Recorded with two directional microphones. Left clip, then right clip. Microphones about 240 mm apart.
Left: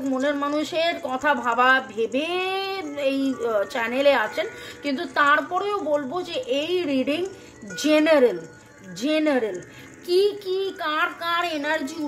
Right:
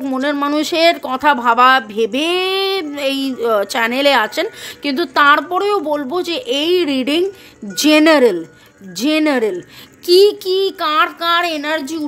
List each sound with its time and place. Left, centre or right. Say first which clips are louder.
0.0 s a woman's voice: right 6 dB; right